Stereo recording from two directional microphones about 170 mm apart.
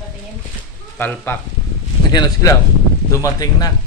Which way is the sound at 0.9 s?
10° left (ahead or behind).